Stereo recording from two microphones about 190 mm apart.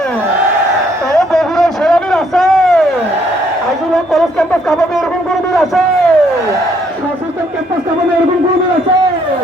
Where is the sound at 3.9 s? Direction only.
Centre (ahead or behind).